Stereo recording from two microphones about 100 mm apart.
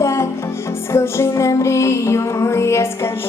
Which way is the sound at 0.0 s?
30° left (ahead or behind).